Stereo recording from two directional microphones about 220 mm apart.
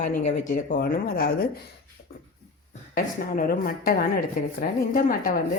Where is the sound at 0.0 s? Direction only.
35° left (ahead or behind).